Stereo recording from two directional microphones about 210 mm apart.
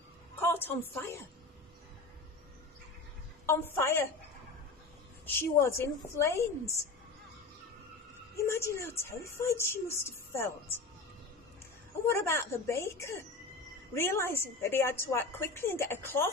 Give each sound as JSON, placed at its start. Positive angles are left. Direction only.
{"t": 0.4, "sound": "a woman's voice", "side_deg": 10}
{"t": 3.4, "sound": "speech", "side_deg": 10}
{"t": 5.2, "sound": "speech", "side_deg": 10}
{"t": 8.4, "sound": "speech", "side_deg": 15}
{"t": 12.1, "sound": "speech", "side_deg": 10}